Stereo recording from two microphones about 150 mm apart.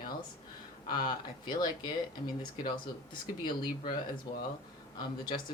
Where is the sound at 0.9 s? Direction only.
30° left (ahead or behind).